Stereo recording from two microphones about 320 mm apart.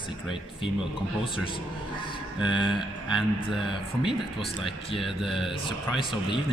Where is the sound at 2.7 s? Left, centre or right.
Centre.